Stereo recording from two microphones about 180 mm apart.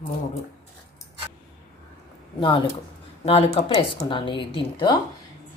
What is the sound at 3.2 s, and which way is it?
A woman's voice, 30° left (ahead or behind).